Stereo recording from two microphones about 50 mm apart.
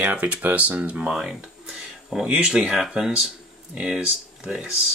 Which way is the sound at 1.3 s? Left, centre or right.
Centre.